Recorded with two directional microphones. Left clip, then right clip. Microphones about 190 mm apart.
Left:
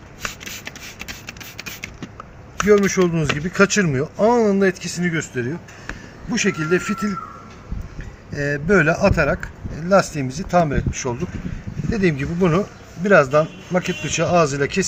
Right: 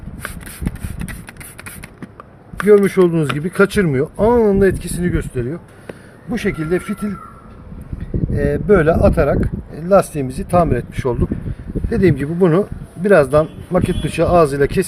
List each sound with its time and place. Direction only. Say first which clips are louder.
2.6 s speech: right 5 dB; 55° right (ahead or behind)
8.4 s speech: right 3 dB; 35° right (ahead or behind)